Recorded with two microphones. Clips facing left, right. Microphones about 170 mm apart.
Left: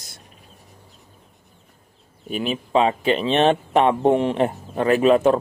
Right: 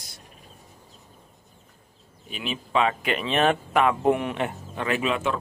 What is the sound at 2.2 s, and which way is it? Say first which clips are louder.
Speech: left 8 dB; 45° left (ahead or behind).